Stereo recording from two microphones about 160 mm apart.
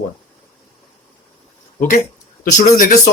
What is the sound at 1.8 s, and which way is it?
Speech, 60° left (ahead or behind).